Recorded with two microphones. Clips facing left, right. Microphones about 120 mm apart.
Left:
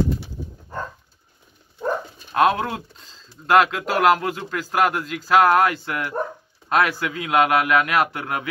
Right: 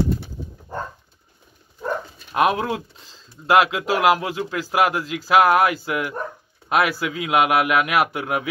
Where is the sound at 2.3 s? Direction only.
20° right (ahead or behind).